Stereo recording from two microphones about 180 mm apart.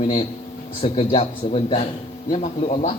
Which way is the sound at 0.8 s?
30° left (ahead or behind).